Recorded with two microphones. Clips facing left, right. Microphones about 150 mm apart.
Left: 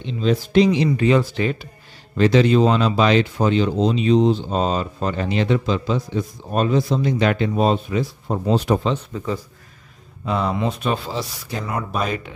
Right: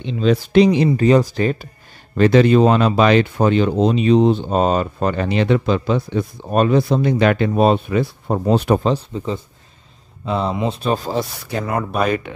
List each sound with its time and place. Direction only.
0.0 s speech: 70° right (ahead or behind)
0.8 s speech: 40° right (ahead or behind)
2.1 s speech: 55° right (ahead or behind)
8.8 s speech: 30° right (ahead or behind); by 12.3 s 60° right (ahead or behind)